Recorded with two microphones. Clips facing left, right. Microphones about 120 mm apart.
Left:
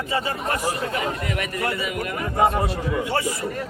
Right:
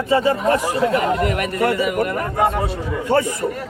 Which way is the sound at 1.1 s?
60° right (ahead or behind).